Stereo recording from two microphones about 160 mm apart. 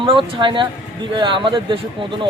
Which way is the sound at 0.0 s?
30° right (ahead or behind).